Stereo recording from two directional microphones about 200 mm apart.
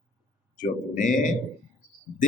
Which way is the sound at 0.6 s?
40° left (ahead or behind).